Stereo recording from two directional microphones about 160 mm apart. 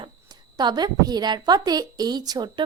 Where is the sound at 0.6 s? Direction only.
25° right (ahead or behind).